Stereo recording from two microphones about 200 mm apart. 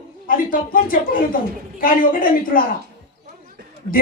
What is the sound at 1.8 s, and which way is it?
Speech, 45° left (ahead or behind).